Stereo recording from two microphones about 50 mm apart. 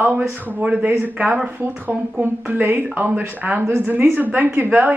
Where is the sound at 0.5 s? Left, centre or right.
Right.